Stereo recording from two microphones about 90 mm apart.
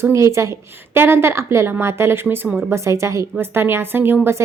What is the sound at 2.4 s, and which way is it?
Speech, 5° right (ahead or behind).